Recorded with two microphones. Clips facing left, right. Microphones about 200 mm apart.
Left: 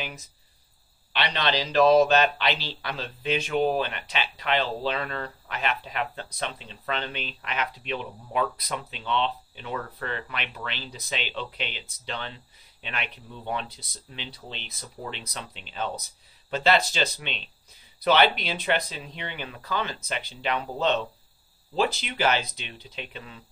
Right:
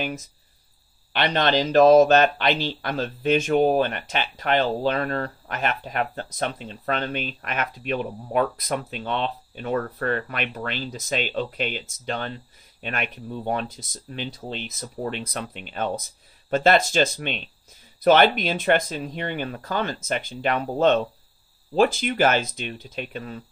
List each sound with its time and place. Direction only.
1.1 s speech: 45° right (ahead or behind)